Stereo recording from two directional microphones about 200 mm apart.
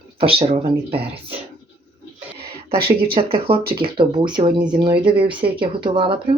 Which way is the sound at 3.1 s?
30° right (ahead or behind).